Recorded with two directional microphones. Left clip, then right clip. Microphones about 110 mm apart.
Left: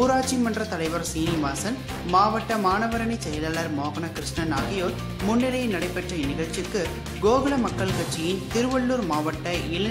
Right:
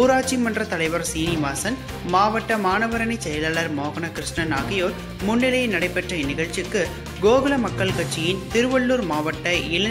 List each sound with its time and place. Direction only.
0.0 s speech: 15° right (ahead or behind)